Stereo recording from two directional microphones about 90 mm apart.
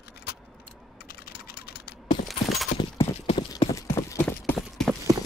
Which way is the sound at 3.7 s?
35° left (ahead or behind).